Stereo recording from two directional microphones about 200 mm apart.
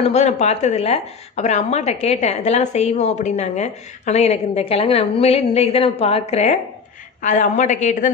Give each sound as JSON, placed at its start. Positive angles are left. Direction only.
{"t": 0.0, "sound": "a woman's voice", "side_deg": 35}